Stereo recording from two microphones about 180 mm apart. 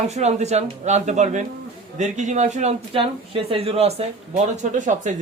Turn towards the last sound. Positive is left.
turn(degrees=-45)  # may be behind; listen again after turning